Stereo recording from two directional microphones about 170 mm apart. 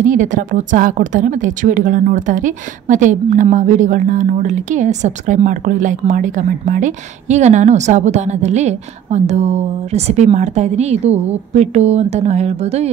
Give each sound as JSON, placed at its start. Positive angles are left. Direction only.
{"t": 0.0, "sound": "speech", "side_deg": -50}